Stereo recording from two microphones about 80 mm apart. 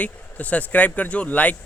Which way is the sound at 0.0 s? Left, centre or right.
Centre.